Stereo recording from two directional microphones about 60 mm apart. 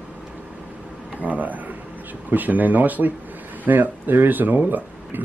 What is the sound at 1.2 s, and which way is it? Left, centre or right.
Speech, right.